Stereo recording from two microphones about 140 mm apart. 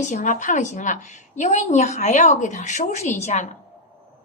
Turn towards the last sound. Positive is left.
turn(degrees=60)  # may be behind; listen again after turning